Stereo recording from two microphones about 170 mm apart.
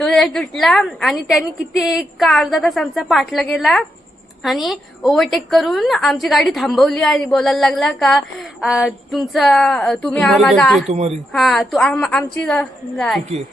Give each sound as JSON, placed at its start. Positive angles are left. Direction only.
{"t": 0.0, "sound": "a woman's voice", "side_deg": 0}
{"t": 10.8, "sound": "speech", "side_deg": -40}
{"t": 11.3, "sound": "a woman's voice", "side_deg": 0}